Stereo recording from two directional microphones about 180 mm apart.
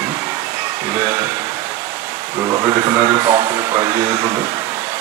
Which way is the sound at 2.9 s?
20° right (ahead or behind).